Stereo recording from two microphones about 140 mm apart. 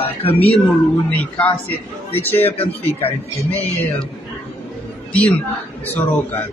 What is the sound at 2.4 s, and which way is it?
Speech, 45° left (ahead or behind).